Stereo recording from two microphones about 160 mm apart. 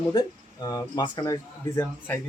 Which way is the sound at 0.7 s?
25° left (ahead or behind).